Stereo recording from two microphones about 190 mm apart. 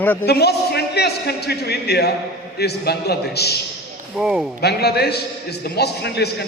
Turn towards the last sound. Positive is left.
turn(degrees=60)  # may be behind; listen again after turning